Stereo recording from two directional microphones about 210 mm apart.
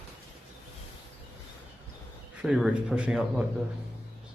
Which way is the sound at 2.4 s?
5° right (ahead or behind).